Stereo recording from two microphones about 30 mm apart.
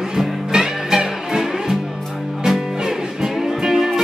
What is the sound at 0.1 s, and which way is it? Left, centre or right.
Music, centre.